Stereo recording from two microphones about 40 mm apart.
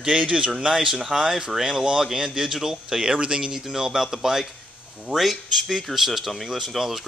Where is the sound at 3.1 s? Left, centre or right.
Right.